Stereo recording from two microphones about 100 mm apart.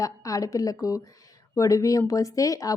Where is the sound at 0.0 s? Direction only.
35° left (ahead or behind).